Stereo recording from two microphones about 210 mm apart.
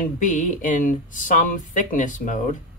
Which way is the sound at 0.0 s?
40° left (ahead or behind).